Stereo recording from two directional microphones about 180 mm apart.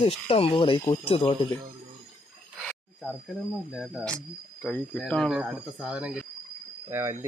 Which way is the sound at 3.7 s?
Centre (ahead or behind).